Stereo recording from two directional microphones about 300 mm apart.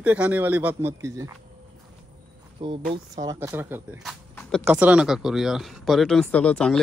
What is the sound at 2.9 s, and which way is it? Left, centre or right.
Speech, centre.